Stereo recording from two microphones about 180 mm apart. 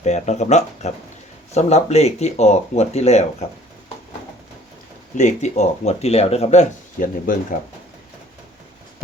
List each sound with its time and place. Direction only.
0.0 s speech: 40° left (ahead or behind)
5.1 s speech: 40° left (ahead or behind)